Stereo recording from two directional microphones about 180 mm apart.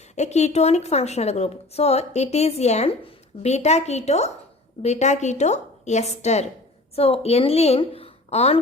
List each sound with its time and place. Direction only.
0.2 s a woman's voice: 40° left (ahead or behind)